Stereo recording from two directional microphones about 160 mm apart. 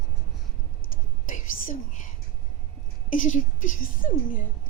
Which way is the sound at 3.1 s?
55° left (ahead or behind).